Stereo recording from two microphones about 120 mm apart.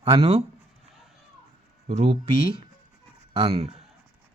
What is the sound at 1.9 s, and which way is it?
Speech, 55° right (ahead or behind).